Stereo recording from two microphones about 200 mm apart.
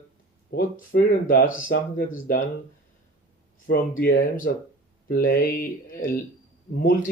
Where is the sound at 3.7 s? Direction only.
45° left (ahead or behind).